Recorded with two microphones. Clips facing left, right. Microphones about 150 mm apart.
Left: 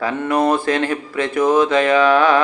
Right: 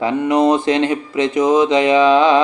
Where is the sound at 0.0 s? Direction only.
20° right (ahead or behind).